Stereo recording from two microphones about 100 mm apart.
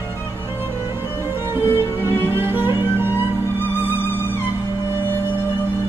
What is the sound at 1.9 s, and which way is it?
Music, 25° left (ahead or behind).